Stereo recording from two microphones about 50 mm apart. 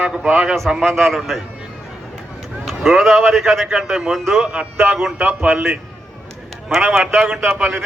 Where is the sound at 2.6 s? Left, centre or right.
Centre.